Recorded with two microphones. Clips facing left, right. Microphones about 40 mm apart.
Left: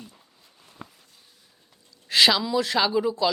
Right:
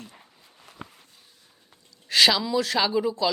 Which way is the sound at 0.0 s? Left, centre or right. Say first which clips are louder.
Right 1 dB; right.